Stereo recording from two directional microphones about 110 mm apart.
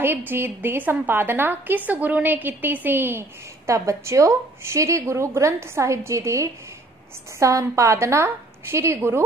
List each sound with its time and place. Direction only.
0.0 s a woman's voice: 20° right (ahead or behind)